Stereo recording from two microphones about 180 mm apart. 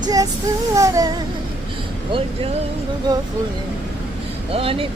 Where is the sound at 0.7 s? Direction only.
20° right (ahead or behind).